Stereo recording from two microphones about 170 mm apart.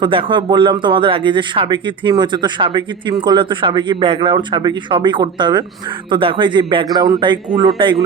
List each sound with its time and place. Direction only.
0.0 s speech: 30° right (ahead or behind)